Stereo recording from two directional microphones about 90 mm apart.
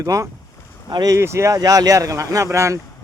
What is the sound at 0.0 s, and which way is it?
Speech, 35° right (ahead or behind).